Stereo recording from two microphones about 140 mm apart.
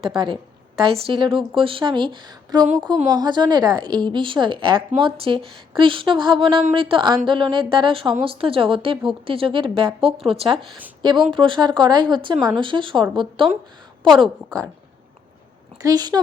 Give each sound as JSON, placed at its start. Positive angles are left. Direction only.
{"t": 0.0, "sound": "speech", "side_deg": -35}
{"t": 11.0, "sound": "a woman's voice", "side_deg": -30}
{"t": 15.8, "sound": "a woman's voice", "side_deg": -25}